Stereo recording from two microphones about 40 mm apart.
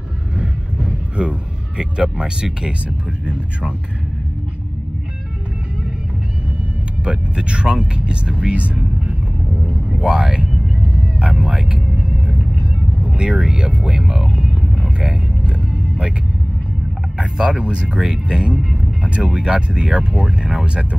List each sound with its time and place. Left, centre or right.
0.4 s a sound: right
1.8 s speech: right
7.1 s speech: right
9.9 s speech: right
11.0 s vehicle: right
11.4 s speech: right
12.3 s vehicle: right
13.6 s vehicle: right
17.2 s speech: right
19.0 s speech: right